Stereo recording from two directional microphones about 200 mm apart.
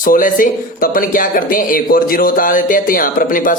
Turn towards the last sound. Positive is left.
turn(degrees=45)  # may be behind; listen again after turning